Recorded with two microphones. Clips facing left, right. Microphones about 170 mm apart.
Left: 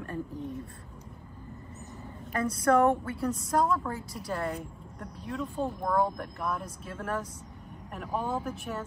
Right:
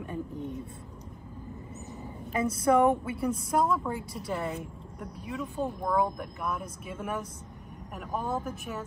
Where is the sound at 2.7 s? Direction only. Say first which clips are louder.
Even; 10° right (ahead or behind).